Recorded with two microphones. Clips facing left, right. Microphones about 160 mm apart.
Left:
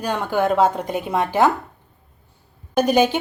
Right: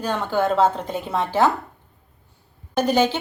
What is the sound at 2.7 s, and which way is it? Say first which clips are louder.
Speech: left 2 dB; 15° left (ahead or behind).